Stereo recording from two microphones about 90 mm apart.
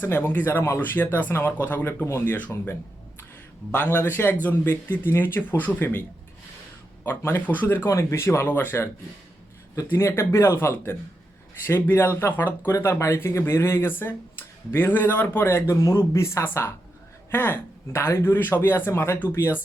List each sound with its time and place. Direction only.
0.1 s speech: 20° left (ahead or behind)
3.7 s speech: 20° left (ahead or behind)
7.0 s a man's voice: 30° left (ahead or behind)